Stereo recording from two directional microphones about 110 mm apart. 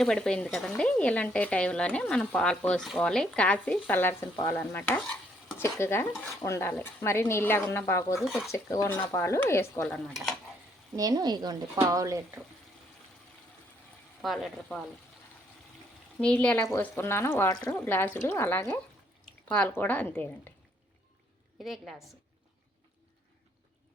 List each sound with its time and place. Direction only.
0.0 s speech: 5° left (ahead or behind); by 9.8 s 25° left (ahead or behind)
9.8 s speech: centre (ahead or behind)
10.9 s speech: 35° right (ahead or behind)
14.2 s speech: centre (ahead or behind)
16.2 s speech: 10° left (ahead or behind)
17.5 s speech: 35° left (ahead or behind)
17.8 s speech: 20° left (ahead or behind)
21.6 s speech: centre (ahead or behind)